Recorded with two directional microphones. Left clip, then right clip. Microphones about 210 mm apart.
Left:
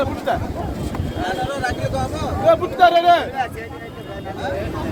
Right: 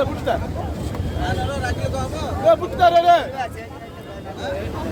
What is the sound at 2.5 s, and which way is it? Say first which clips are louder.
Speech: left 1 dB; 60° right (ahead or behind).